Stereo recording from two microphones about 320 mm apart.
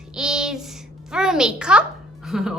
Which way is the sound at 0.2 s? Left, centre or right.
Centre.